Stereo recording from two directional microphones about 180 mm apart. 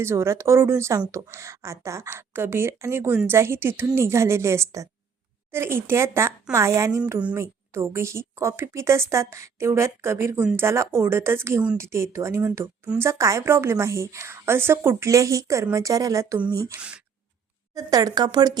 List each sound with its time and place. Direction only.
0.0 s a woman's voice: 15° right (ahead or behind)
17.7 s speech: 20° right (ahead or behind)